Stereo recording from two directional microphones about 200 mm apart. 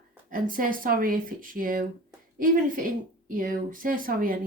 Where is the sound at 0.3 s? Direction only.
45° right (ahead or behind).